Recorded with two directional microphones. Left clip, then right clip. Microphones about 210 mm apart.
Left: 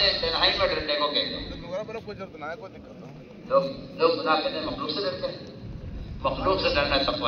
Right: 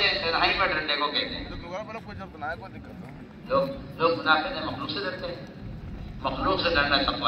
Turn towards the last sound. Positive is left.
turn(degrees=25)  # may be behind; listen again after turning